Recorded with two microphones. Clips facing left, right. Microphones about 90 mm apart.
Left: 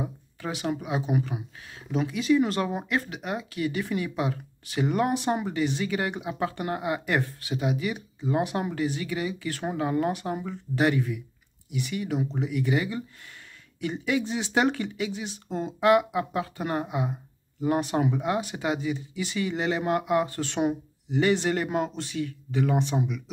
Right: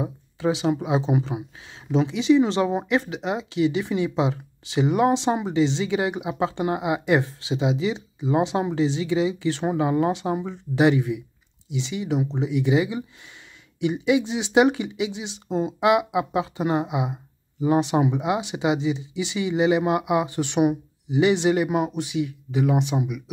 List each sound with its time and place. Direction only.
0.0 s speech: 20° right (ahead or behind)